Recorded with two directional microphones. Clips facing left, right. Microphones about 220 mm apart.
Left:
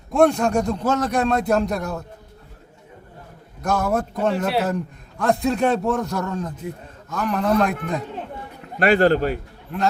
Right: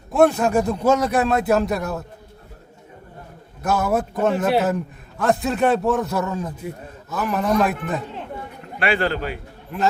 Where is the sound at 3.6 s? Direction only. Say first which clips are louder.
Right 1 dB; 5° right (ahead or behind).